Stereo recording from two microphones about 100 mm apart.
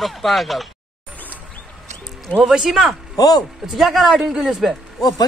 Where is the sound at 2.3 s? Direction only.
5° right (ahead or behind).